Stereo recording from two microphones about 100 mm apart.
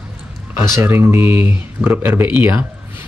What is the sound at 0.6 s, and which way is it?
Speech, 25° right (ahead or behind).